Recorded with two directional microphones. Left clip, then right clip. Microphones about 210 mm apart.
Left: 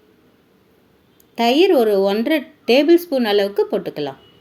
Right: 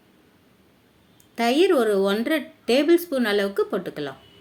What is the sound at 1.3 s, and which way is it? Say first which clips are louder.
Speech: left 5 dB; 15° left (ahead or behind).